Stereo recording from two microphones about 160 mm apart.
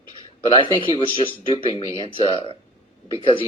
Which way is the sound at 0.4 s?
30° left (ahead or behind).